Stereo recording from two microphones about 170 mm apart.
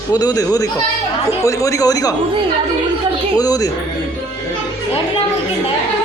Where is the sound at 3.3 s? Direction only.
20° left (ahead or behind).